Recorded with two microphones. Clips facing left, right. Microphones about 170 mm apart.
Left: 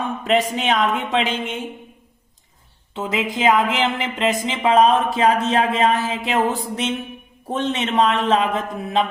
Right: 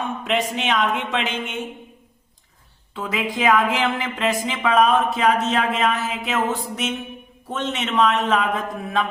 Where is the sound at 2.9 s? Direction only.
25° left (ahead or behind).